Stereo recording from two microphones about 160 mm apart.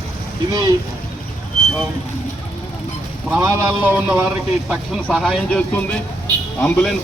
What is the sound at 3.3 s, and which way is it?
Speech, 15° right (ahead or behind).